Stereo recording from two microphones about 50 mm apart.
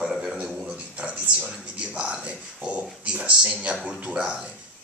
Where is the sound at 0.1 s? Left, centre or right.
Centre.